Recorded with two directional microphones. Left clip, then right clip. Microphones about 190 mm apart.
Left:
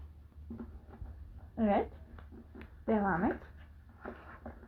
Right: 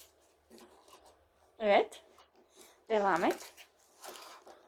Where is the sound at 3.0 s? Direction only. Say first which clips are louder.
Right 5 dB; 70° right (ahead or behind).